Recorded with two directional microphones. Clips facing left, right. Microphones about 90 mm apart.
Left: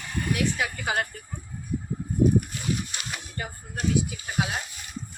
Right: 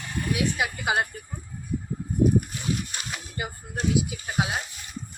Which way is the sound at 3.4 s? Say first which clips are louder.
Right 3 dB; 10° right (ahead or behind).